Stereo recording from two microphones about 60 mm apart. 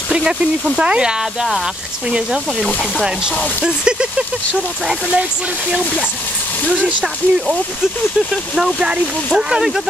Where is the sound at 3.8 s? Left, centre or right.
Centre.